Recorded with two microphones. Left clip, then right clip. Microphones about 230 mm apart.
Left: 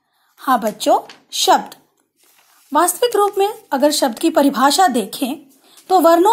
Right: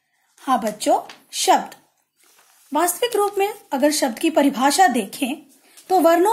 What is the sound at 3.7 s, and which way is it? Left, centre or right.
Speech, centre.